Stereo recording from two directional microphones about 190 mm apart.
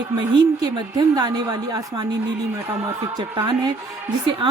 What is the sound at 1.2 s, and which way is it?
Speech, 20° right (ahead or behind).